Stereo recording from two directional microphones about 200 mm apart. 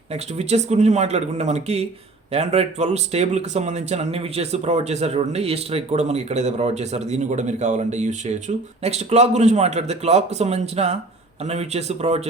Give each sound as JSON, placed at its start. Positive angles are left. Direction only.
{"t": 0.1, "sound": "speech", "side_deg": -35}